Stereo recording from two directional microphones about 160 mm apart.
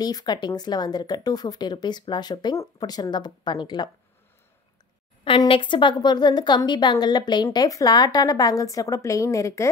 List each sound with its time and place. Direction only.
0.0 s a woman's voice: 25° left (ahead or behind)
5.2 s a woman's voice: 35° left (ahead or behind)